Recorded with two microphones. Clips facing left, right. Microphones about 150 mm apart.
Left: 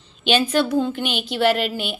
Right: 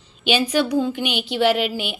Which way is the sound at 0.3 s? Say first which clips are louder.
Left 1 dB; 10° right (ahead or behind).